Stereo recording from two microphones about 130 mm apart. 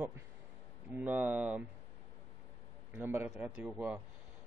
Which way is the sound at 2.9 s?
15° right (ahead or behind).